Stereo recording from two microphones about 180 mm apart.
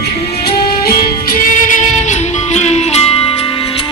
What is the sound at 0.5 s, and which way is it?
Music, 55° left (ahead or behind).